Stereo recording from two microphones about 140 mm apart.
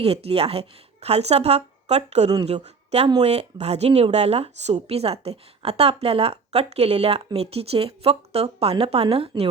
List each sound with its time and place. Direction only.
0.0 s speech: 45° right (ahead or behind)
9.3 s speech: 30° right (ahead or behind)